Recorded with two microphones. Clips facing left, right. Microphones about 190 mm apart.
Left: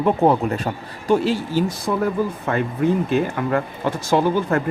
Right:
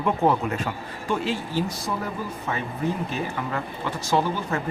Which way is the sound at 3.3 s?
50° left (ahead or behind).